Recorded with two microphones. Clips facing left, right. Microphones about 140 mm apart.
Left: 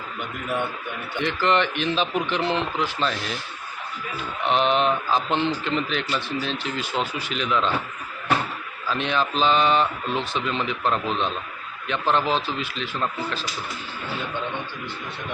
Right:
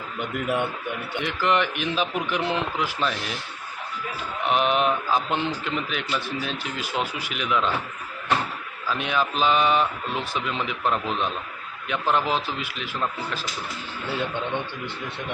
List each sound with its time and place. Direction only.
1.2 s a man's voice: 10° right (ahead or behind)
4.4 s a man's voice: 5° right (ahead or behind)
8.9 s a man's voice: 10° right (ahead or behind)